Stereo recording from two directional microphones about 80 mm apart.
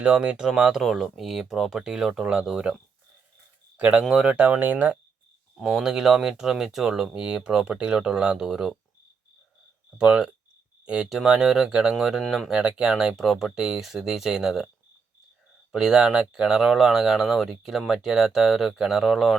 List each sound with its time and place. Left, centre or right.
0.0 s speech: centre
3.8 s speech: centre
4.4 s speech: centre
5.5 s speech: centre
10.0 s speech: centre
12.2 s speech: centre
12.5 s speech: centre
15.7 s speech: centre